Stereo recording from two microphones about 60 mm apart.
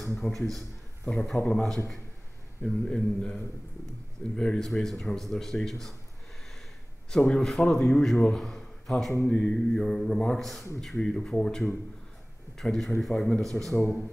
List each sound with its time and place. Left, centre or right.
0.0 s a man's voice: centre
7.1 s a man's voice: centre
9.3 s a man's voice: centre